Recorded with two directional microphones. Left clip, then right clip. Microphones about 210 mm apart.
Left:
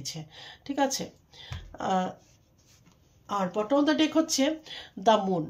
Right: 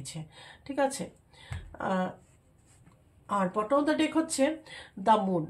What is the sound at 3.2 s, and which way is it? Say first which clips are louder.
Speech: even; 35° left (ahead or behind).